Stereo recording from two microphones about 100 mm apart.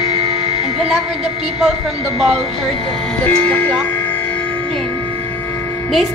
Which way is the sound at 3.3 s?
15° left (ahead or behind).